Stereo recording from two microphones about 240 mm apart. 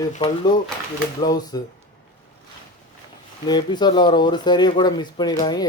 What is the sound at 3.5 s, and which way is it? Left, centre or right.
Speech, centre.